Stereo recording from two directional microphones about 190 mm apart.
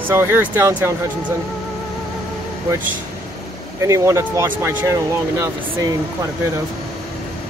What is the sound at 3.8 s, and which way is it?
Speech, 15° right (ahead or behind).